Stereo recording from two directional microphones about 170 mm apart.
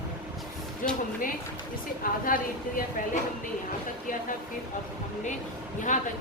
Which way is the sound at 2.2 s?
55° left (ahead or behind).